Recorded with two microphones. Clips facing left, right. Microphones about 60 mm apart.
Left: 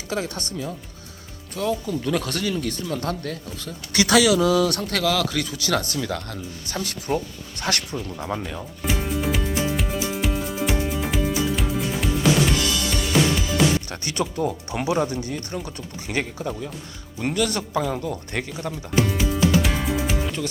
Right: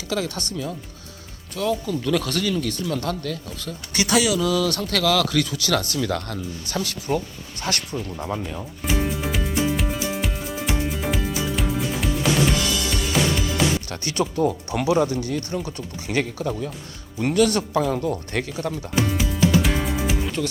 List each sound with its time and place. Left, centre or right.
0.1 s speech: left
3.0 s speech: left
3.9 s speech: left
4.3 s speech: left
6.0 s speech: centre
7.6 s speech: left
8.3 s speech: centre
8.5 s music: centre
13.9 s speech: left
17.3 s speech: centre
18.3 s speech: left
19.1 s music: centre